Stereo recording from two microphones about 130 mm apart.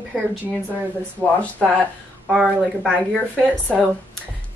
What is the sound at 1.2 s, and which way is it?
Speech, 20° left (ahead or behind).